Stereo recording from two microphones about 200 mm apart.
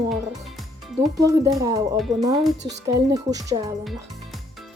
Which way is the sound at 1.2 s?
15° right (ahead or behind).